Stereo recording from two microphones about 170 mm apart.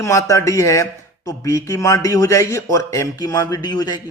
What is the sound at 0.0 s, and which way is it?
A man's voice, 20° left (ahead or behind).